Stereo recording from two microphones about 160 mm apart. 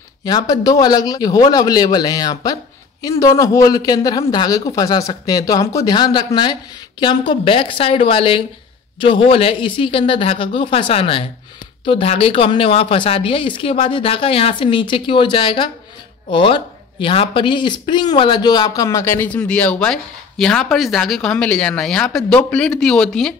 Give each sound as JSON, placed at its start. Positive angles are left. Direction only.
{"t": 0.2, "sound": "a woman's voice", "side_deg": 25}